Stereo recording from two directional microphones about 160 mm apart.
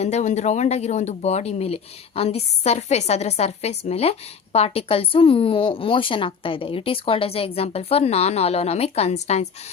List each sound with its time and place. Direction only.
0.0 s a woman's voice: 45° left (ahead or behind)